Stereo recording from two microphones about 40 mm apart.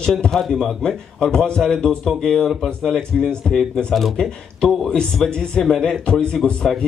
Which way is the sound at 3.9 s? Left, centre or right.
Centre.